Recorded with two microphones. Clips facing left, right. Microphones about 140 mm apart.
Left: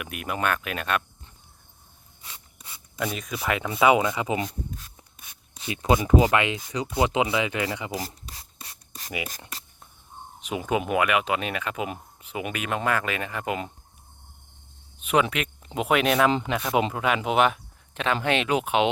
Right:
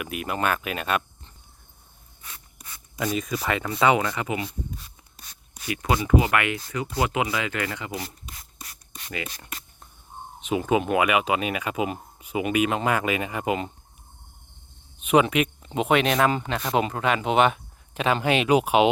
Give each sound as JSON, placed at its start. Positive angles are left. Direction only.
{"t": 0.0, "sound": "speech", "side_deg": 0}
{"t": 3.0, "sound": "speech", "side_deg": 0}
{"t": 3.9, "sound": "speech", "side_deg": 15}
{"t": 5.5, "sound": "speech", "side_deg": 25}
{"t": 7.9, "sound": "rub", "side_deg": 35}
{"t": 10.4, "sound": "speech", "side_deg": 0}
{"t": 15.0, "sound": "speech", "side_deg": -10}
{"t": 15.8, "sound": "speech", "side_deg": 5}